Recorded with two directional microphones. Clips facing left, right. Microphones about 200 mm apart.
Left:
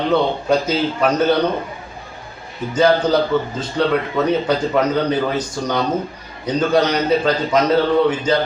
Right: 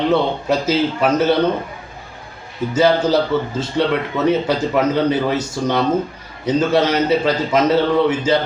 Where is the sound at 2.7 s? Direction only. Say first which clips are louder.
Even; 5° right (ahead or behind).